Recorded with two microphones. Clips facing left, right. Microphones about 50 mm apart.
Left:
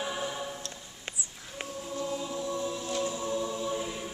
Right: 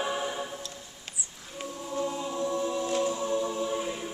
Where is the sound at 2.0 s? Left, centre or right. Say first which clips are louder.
Right 3 dB; centre.